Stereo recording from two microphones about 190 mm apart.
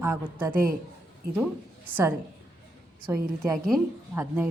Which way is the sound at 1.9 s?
10° right (ahead or behind).